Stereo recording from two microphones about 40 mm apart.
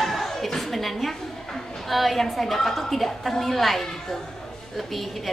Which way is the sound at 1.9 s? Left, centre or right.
Centre.